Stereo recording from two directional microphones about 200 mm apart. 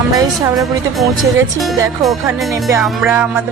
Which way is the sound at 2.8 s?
5° right (ahead or behind).